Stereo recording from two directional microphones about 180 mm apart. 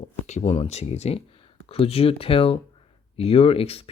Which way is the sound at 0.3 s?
40° left (ahead or behind).